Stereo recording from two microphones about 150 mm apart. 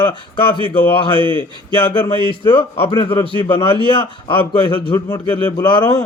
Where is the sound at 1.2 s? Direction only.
30° right (ahead or behind).